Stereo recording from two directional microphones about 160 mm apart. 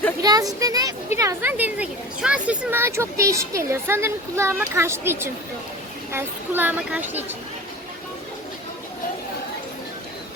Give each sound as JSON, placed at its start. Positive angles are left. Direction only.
{"t": 0.2, "sound": "a woman's voice", "side_deg": -25}